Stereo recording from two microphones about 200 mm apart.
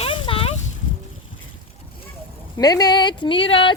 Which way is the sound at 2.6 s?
20° left (ahead or behind).